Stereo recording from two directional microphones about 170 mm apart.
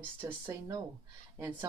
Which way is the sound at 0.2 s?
20° right (ahead or behind).